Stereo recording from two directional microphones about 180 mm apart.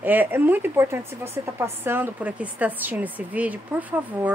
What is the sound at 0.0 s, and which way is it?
Speech, 10° right (ahead or behind).